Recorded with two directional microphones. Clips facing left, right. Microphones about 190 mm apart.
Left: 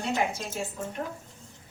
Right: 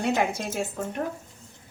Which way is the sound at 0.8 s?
60° right (ahead or behind).